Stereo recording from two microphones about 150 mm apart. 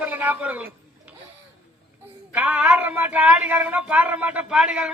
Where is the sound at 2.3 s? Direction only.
10° right (ahead or behind).